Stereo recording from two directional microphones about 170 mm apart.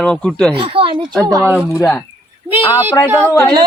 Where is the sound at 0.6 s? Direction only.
30° right (ahead or behind).